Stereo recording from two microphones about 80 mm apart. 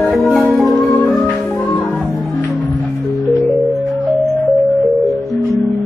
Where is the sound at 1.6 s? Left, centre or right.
Centre.